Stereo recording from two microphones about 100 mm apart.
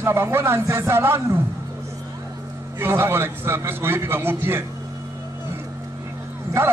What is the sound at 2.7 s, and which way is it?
A man's voice, 25° right (ahead or behind).